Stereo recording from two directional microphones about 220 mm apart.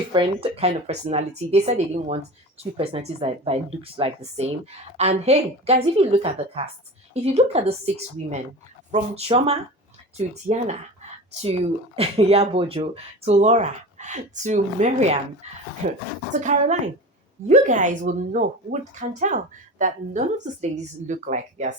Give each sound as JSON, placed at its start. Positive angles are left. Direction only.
{"t": 0.1, "sound": "speech", "side_deg": -25}